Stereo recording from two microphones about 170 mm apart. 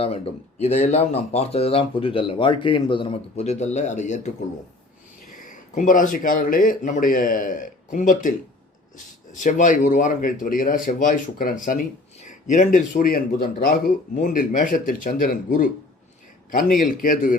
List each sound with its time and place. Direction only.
0.6 s speech: 40° left (ahead or behind)
9.3 s speech: 50° left (ahead or behind)